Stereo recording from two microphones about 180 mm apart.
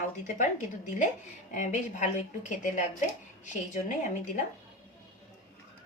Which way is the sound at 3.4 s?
45° left (ahead or behind).